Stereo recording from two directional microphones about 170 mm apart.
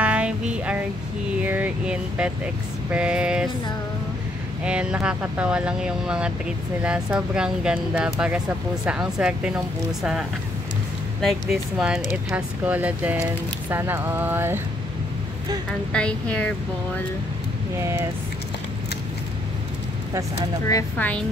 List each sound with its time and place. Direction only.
0.0 s music: 5° right (ahead or behind)
1.4 s speech: 10° right (ahead or behind)
4.6 s speech: 5° right (ahead or behind)
11.1 s speech: centre (ahead or behind)
15.9 s speech: 5° left (ahead or behind)
17.7 s speech: 15° right (ahead or behind)
20.6 s speech: 20° left (ahead or behind)